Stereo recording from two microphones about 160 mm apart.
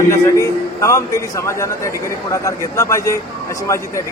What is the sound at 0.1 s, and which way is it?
A man's voice, 20° left (ahead or behind).